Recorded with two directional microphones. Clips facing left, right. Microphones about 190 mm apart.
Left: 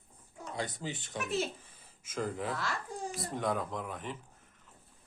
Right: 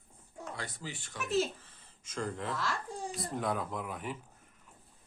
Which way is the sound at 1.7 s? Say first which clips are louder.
Left 2 dB; 10° left (ahead or behind).